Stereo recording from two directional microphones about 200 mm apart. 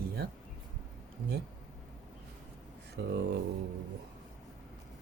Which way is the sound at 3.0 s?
60° right (ahead or behind).